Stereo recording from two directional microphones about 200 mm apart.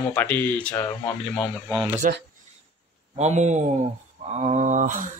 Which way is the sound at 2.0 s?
40° right (ahead or behind).